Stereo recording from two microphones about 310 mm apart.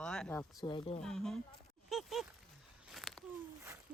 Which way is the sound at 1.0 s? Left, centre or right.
Centre.